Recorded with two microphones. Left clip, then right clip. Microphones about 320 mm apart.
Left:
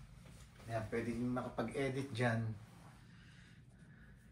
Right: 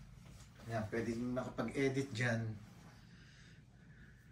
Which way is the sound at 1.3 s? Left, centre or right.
Centre.